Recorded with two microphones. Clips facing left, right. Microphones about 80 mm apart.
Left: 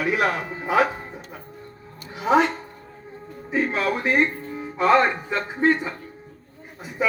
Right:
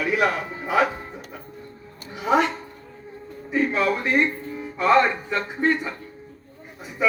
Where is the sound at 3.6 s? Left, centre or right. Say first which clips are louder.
Right 1 dB; left.